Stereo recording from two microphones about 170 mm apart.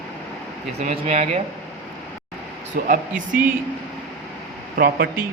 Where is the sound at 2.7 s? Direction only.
50° right (ahead or behind).